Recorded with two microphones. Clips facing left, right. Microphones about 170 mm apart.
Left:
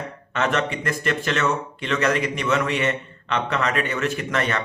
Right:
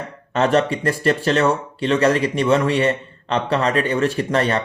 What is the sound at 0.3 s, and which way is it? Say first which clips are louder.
Speech: right 6 dB; 35° right (ahead or behind).